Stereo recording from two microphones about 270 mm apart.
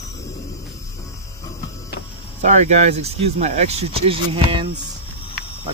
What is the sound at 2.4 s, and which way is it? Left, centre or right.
Speech, right.